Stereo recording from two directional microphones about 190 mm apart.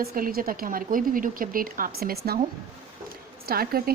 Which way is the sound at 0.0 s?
50° right (ahead or behind).